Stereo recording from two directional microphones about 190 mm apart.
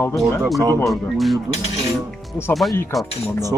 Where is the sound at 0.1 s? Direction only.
Centre (ahead or behind).